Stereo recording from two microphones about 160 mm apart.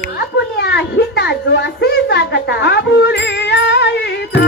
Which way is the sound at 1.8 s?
90° left.